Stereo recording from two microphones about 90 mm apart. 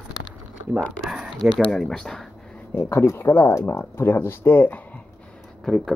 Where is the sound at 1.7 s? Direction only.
5° left (ahead or behind).